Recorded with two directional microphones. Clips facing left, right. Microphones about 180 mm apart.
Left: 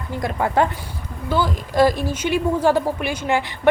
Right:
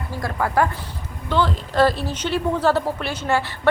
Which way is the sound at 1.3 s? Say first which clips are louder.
Even; 10° left (ahead or behind).